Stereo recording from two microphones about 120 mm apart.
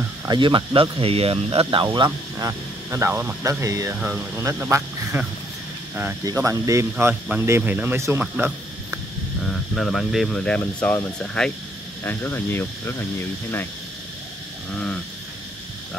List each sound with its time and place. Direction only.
0.3 s speech: 40° right (ahead or behind)
2.3 s speech: 25° right (ahead or behind)
3.9 s speech: 15° right (ahead or behind)
6.2 s speech: 25° right (ahead or behind)
9.4 s speech: 5° left (ahead or behind)
12.0 s speech: 20° left (ahead or behind)
14.7 s speech: 10° left (ahead or behind)